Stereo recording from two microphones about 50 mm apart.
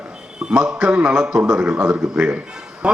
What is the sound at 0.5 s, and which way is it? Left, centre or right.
A man's voice, centre.